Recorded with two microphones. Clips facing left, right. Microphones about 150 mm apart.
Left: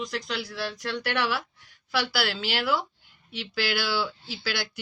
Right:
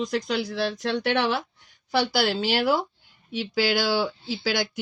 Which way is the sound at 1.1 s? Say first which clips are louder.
Right 2 dB; 20° right (ahead or behind).